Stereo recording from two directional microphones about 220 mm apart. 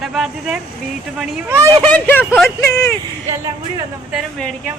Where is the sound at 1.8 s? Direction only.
5° left (ahead or behind).